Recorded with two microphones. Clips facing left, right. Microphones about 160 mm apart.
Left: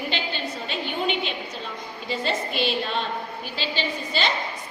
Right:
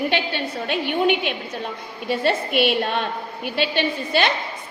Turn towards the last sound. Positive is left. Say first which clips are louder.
# right 5 dB
turn(degrees=-60)  # may be behind; listen again after turning